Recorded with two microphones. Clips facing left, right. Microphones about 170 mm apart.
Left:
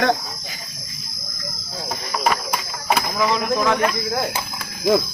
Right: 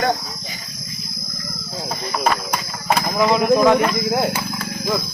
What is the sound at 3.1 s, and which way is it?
Speech, 20° right (ahead or behind).